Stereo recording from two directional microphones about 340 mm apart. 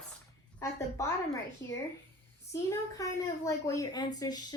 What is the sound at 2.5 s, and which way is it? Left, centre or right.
A woman's voice, centre.